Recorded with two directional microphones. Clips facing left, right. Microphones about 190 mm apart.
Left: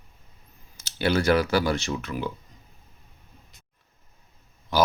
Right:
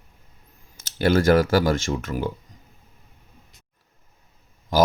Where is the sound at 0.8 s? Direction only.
50° right (ahead or behind).